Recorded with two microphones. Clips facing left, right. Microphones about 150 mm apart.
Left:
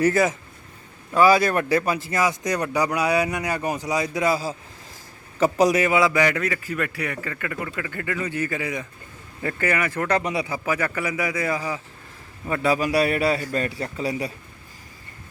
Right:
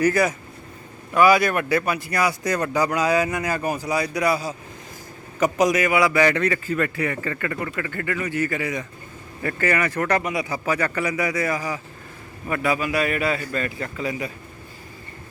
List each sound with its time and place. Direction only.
0.0 s speech: 25° left (ahead or behind)
6.2 s a man's voice: 5° left (ahead or behind)
12.5 s a man's voice: 30° left (ahead or behind)